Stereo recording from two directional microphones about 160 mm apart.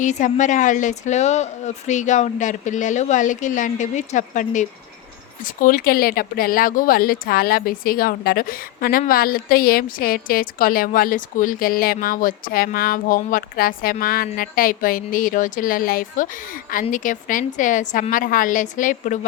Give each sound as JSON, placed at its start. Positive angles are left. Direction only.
{"t": 0.0, "sound": "a woman's voice", "side_deg": 50}